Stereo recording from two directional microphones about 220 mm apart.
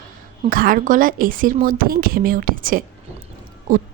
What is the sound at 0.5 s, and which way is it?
Speech, 40° right (ahead or behind).